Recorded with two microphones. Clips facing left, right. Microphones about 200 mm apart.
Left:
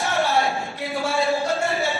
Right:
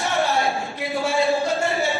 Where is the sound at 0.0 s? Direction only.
Centre (ahead or behind).